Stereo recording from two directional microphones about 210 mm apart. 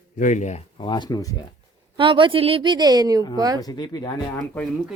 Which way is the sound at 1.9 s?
25° right (ahead or behind).